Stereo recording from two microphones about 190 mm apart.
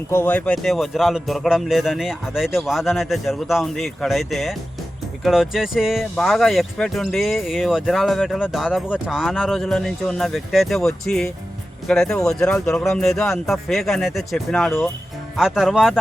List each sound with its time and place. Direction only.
0.1 s speech: 10° left (ahead or behind)